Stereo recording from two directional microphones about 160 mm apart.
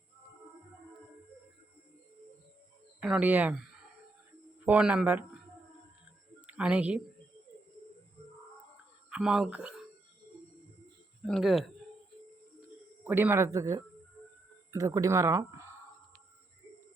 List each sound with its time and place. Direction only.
3.0 s speech: 5° right (ahead or behind)
6.5 s speech: 5° right (ahead or behind)
9.0 s speech: 5° right (ahead or behind)
11.3 s speech: centre (ahead or behind)
13.1 s speech: 10° right (ahead or behind)